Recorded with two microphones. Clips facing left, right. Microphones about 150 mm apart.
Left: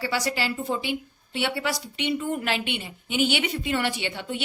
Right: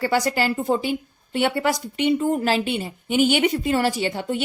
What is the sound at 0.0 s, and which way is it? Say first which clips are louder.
A woman's voice: right 6 dB; 50° right (ahead or behind).